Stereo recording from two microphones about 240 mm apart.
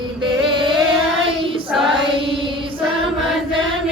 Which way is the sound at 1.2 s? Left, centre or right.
Right.